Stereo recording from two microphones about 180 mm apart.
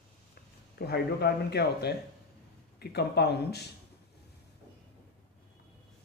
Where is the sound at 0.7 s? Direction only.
65° left (ahead or behind).